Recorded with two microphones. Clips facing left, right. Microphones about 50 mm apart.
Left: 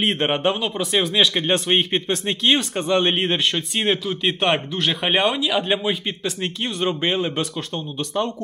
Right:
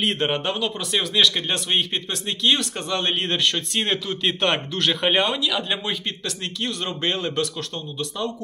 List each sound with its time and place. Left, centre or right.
0.0 s speech: left
5.4 s speech: left